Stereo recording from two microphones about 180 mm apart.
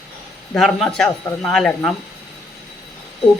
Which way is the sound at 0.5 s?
Centre (ahead or behind).